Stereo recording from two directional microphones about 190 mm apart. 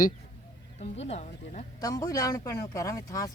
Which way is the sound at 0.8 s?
35° left (ahead or behind).